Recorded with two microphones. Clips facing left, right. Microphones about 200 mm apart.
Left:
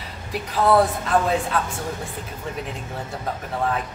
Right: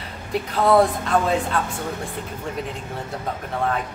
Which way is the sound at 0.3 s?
Centre (ahead or behind).